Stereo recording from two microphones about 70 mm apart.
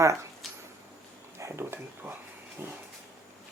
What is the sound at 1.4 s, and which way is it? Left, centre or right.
Speech, right.